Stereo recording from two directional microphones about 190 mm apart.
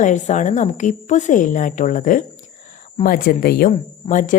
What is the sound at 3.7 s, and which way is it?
Speech, 40° left (ahead or behind).